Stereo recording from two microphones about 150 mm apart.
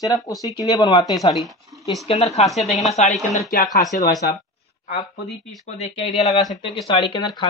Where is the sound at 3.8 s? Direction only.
25° left (ahead or behind).